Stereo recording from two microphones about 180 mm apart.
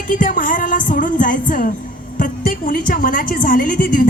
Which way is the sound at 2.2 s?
50° left (ahead or behind).